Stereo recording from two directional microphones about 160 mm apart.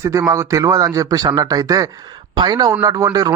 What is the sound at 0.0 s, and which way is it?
Speech, 20° right (ahead or behind).